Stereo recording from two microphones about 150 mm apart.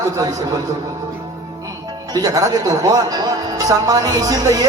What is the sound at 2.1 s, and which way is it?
Speech, 25° right (ahead or behind).